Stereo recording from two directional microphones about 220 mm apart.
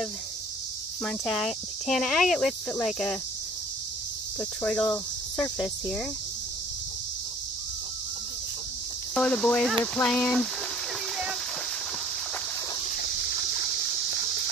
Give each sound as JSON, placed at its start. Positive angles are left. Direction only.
{"t": 1.0, "sound": "speech", "side_deg": 0}
{"t": 4.4, "sound": "speech", "side_deg": 5}
{"t": 9.1, "sound": "speech", "side_deg": 5}
{"t": 12.9, "sound": "a sound", "side_deg": 50}